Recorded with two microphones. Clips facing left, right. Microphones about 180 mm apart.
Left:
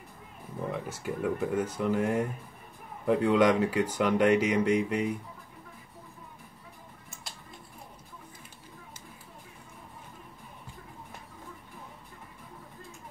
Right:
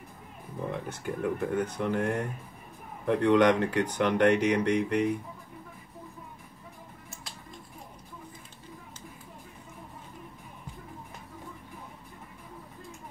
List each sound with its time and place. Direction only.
0.7 s speech: 5° left (ahead or behind)